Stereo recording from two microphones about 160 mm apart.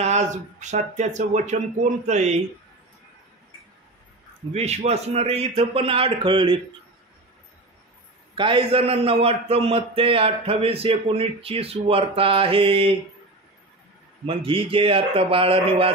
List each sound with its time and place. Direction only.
0.0 s speech: 45° right (ahead or behind)
4.5 s a man's voice: 40° right (ahead or behind)
8.4 s a man's voice: 30° right (ahead or behind)
14.2 s a man's voice: 35° right (ahead or behind)